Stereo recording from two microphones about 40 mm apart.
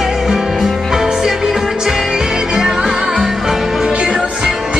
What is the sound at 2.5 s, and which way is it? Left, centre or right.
Music, centre.